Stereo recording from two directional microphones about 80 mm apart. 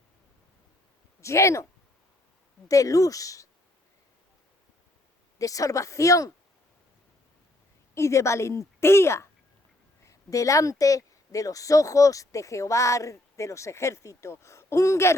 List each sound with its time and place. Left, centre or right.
1.2 s speech: left
2.6 s a woman's voice: left
5.4 s a woman's voice: left
7.9 s speech: left